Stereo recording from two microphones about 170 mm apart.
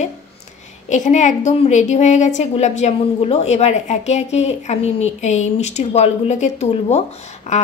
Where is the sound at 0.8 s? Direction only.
45° left (ahead or behind).